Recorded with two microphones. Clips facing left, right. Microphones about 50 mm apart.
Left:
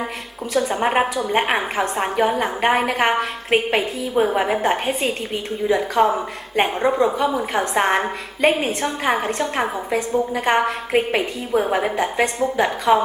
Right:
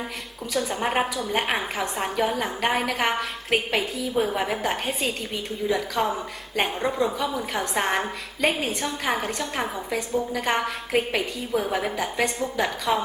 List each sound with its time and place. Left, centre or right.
0.5 s a woman's voice: centre